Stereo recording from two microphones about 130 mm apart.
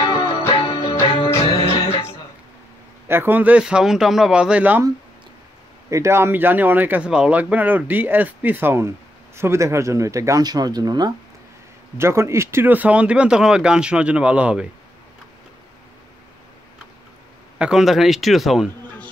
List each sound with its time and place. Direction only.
0.0 s music: 40° left (ahead or behind)
3.1 s speech: 15° right (ahead or behind)
5.9 s speech: 20° right (ahead or behind)
12.0 s speech: 20° right (ahead or behind)
17.6 s a man's voice: 5° right (ahead or behind)